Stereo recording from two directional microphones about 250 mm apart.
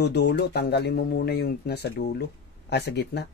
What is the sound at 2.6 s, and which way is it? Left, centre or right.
Speech, left.